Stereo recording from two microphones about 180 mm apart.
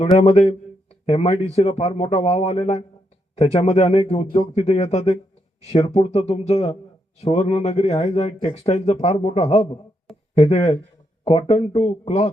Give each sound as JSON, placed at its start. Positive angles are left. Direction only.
{"t": 0.2, "sound": "speech", "side_deg": 35}